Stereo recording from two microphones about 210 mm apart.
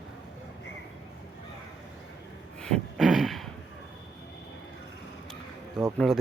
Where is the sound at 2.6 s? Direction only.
5° left (ahead or behind).